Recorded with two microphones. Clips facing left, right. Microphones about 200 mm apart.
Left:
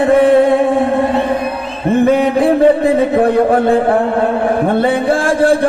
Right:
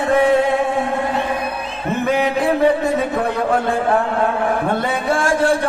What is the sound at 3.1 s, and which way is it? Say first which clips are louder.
A man's voice: left 8 dB; 55° left (ahead or behind).